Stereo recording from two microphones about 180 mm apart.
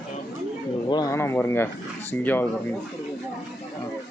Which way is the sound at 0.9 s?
20° left (ahead or behind).